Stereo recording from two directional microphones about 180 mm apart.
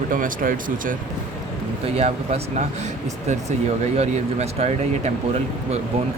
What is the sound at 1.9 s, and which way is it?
Speech, 35° right (ahead or behind).